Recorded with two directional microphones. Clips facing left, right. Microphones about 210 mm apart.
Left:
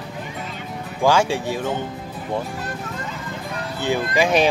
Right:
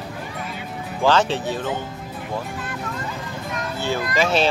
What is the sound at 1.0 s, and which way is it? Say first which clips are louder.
Speech: left 1 dB; 10° left (ahead or behind).